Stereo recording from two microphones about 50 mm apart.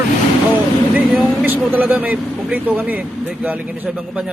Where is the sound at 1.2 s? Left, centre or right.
Right.